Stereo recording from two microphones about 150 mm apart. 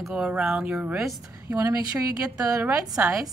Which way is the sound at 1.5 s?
20° right (ahead or behind).